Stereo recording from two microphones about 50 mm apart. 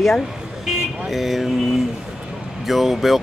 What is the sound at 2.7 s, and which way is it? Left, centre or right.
Speech, centre.